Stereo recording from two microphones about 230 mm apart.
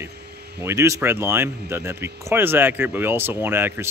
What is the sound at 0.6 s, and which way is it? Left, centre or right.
Speech, centre.